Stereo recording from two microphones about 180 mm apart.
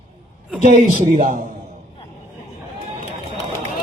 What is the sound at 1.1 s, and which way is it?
Speech, 45° right (ahead or behind).